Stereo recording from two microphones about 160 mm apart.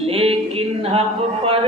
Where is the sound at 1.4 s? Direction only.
35° right (ahead or behind).